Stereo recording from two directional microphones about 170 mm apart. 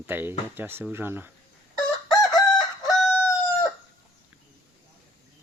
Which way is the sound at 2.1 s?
20° left (ahead or behind).